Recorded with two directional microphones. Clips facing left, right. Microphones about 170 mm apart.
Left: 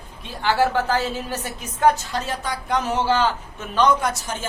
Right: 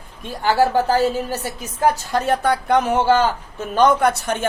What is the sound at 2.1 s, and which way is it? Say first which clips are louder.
Speech: right 8 dB; 60° right (ahead or behind).